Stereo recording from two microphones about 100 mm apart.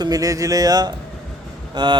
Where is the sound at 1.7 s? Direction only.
50° right (ahead or behind).